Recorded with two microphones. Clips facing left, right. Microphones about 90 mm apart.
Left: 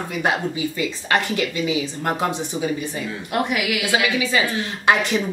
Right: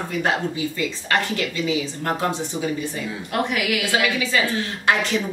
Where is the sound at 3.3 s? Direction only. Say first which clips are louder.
Left 1 dB; 5° left (ahead or behind).